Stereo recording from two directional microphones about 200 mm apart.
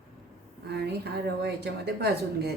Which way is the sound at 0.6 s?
55° right (ahead or behind).